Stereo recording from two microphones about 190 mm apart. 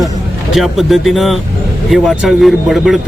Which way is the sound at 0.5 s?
Centre (ahead or behind).